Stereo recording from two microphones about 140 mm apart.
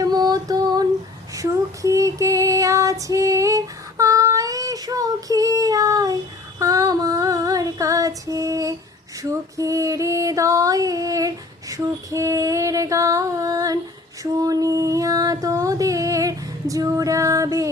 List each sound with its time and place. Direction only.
0.0 s female singing: 30° right (ahead or behind)